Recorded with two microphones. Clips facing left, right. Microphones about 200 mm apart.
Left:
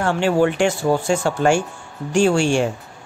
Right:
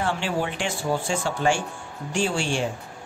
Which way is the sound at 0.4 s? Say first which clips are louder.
Left 10 dB; 60° left (ahead or behind).